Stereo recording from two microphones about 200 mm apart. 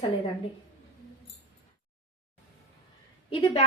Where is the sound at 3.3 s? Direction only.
30° left (ahead or behind).